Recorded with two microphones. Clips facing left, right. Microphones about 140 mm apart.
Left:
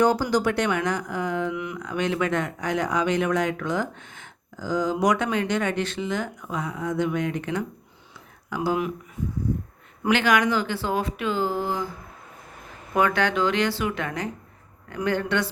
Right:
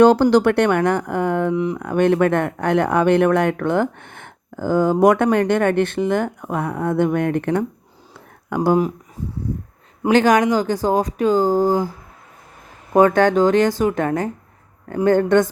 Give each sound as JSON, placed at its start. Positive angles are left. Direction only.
{"t": 0.0, "sound": "speech", "side_deg": -65}
{"t": 1.5, "sound": "speech", "side_deg": -35}
{"t": 1.8, "sound": "speech", "side_deg": -55}
{"t": 9.2, "sound": "speech", "side_deg": -35}
{"t": 12.9, "sound": "speech", "side_deg": -40}